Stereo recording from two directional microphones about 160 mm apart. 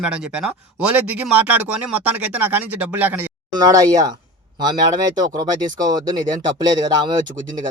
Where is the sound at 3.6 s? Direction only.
20° right (ahead or behind).